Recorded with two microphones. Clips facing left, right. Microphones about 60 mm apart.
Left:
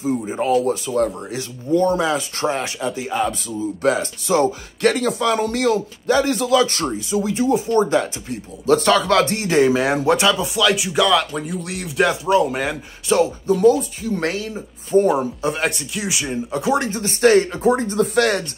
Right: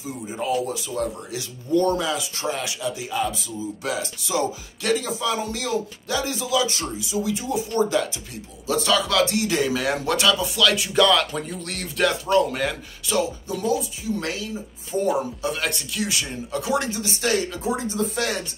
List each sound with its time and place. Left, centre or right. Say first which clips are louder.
0.0 s speech: left 8 dB; left
1.7 s speech: left 4 dB; left
4.9 s speech: left 6 dB; left
8.6 s speech: left 7 dB; left; by 11.1 s centre
11.1 s speech: left 2 dB; centre; by 15.0 s left
15.0 s speech: left 5 dB; left
18.0 s speech: left 8 dB; left